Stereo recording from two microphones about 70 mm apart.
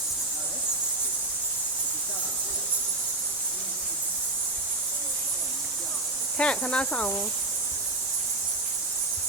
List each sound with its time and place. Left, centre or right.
6.3 s speech: centre